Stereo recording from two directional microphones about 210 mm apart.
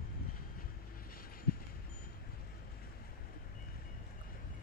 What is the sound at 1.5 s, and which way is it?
Wind chime, 50° left (ahead or behind).